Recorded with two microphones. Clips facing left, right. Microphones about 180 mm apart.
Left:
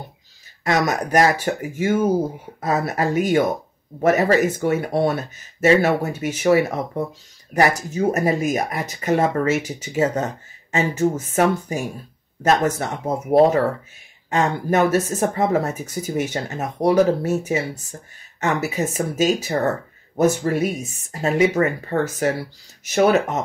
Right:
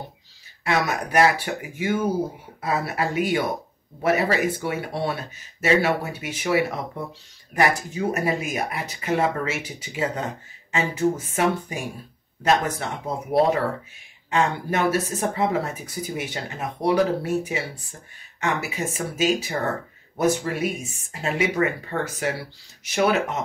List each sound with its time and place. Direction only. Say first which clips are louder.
0.7 s speech: left 4 dB; 40° left (ahead or behind)
14.3 s speech: left 4 dB; 45° left (ahead or behind)